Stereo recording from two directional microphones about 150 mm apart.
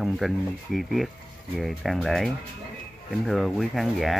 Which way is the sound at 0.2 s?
Centre (ahead or behind).